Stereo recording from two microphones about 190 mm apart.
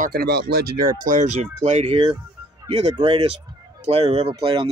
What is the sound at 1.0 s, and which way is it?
Speech, 40° right (ahead or behind).